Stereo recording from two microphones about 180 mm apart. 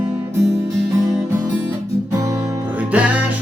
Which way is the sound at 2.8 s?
10° right (ahead or behind).